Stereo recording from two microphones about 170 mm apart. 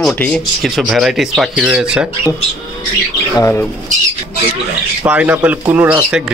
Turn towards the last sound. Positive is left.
turn(degrees=-10)  # may be behind; listen again after turning